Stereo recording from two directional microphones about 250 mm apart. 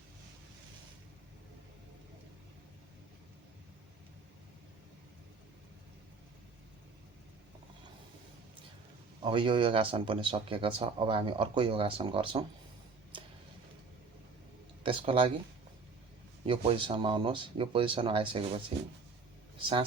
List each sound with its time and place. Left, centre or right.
9.2 s speech: centre
14.8 s speech: right
16.5 s speech: right